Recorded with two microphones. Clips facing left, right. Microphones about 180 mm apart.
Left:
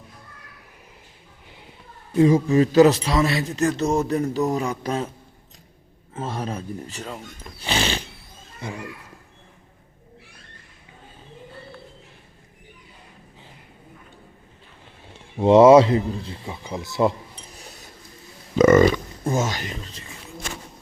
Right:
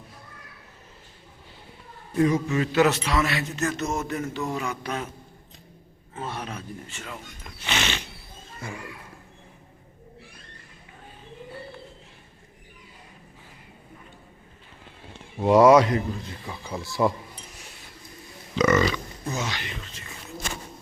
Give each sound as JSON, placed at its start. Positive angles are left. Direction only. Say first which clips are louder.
{"t": 2.1, "sound": "a man's voice", "louder": "left 6 dB", "side_deg": 30}
{"t": 6.1, "sound": "a man's voice", "louder": "left 5 dB", "side_deg": 40}
{"t": 15.4, "sound": "speech", "louder": "left 4 dB", "side_deg": 25}
{"t": 18.5, "sound": "speech", "louder": "left 7 dB", "side_deg": 50}